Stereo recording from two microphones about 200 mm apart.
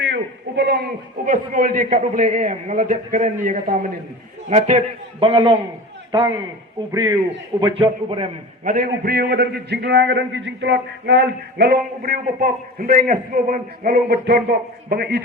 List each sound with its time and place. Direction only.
0.0 s a man's voice: 60° right (ahead or behind); by 5.5 s 25° right (ahead or behind)
6.9 s a man's voice: 20° right (ahead or behind)
8.6 s a man's voice: 45° right (ahead or behind)